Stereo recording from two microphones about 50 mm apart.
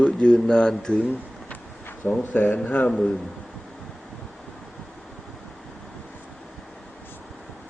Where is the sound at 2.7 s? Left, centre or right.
Left.